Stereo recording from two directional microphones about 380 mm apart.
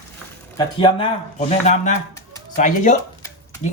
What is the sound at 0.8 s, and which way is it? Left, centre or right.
Speech, centre.